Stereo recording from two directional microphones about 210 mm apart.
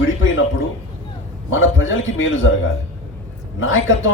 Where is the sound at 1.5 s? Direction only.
70° left (ahead or behind).